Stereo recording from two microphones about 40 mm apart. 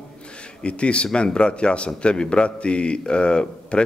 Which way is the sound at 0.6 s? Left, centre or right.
Left.